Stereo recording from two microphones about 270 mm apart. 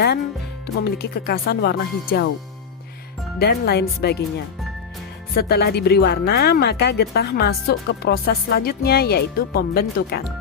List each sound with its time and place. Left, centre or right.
0.8 s speech: left
3.3 s speech: left
5.3 s speech: left